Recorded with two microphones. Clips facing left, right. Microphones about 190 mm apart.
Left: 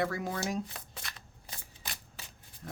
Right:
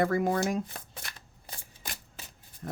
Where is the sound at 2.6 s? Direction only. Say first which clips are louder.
Right 6 dB; 50° right (ahead or behind).